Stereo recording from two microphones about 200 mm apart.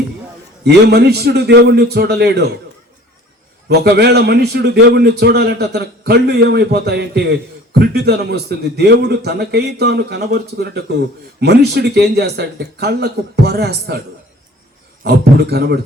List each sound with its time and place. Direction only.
0.6 s a man's voice: 55° right (ahead or behind)
3.7 s a man's voice: 55° right (ahead or behind)
15.4 s a man's voice: 55° right (ahead or behind)